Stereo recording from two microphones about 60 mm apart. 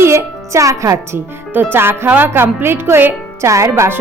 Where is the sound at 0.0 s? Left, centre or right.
Right.